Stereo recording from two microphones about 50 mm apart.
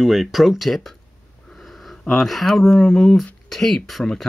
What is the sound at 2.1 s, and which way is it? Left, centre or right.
Speech, centre.